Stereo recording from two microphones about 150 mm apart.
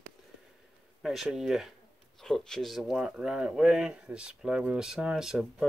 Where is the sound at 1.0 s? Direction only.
Centre (ahead or behind).